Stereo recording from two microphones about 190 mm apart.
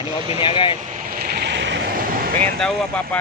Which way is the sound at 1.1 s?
55° right (ahead or behind).